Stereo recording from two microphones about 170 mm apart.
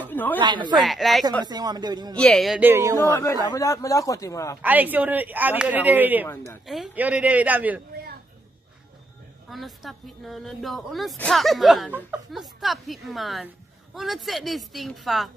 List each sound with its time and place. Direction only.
0.0 s a sound: 10° left (ahead or behind)
0.4 s speech: 25° right (ahead or behind)
0.8 s speech: centre (ahead or behind)
1.4 s speech: 25° right (ahead or behind)
2.1 s speech: centre (ahead or behind)
2.6 s speech: 15° right (ahead or behind)
3.0 s a man's voice: 15° left (ahead or behind)
4.6 s speech: 10° right (ahead or behind)
6.2 s speech: 15° left (ahead or behind)
6.6 s speech: centre (ahead or behind)
9.5 s speech: centre (ahead or behind)